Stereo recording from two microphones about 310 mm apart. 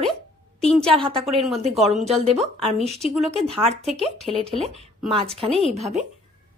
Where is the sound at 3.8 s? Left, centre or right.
Centre.